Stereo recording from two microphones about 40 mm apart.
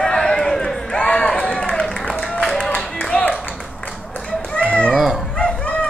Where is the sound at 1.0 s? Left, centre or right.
Left.